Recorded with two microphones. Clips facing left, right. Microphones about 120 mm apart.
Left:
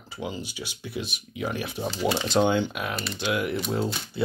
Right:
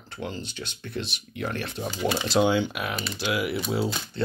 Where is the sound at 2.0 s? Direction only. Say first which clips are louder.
Left 1 dB; 15° left (ahead or behind).